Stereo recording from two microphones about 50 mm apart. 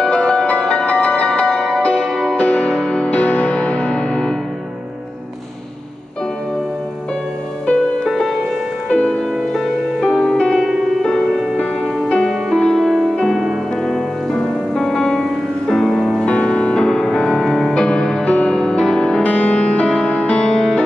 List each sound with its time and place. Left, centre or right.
0.1 s music: centre
2.3 s music: left
3.1 s music: left
7.6 s music: left
8.1 s music: centre
8.8 s music: centre
9.5 s music: centre
13.8 s music: centre
16.3 s music: centre
17.3 s music: centre
17.7 s music: centre
18.2 s music: left
18.5 s music: centre
19.2 s music: left